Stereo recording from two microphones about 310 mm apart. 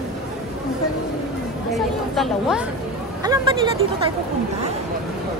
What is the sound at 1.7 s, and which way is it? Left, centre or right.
Speech, centre.